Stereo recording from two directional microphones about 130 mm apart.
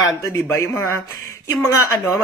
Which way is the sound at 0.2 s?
20° left (ahead or behind).